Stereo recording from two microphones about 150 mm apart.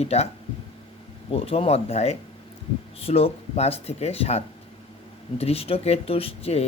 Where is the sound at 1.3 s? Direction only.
40° left (ahead or behind).